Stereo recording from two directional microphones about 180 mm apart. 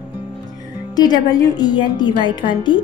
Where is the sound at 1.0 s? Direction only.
20° left (ahead or behind).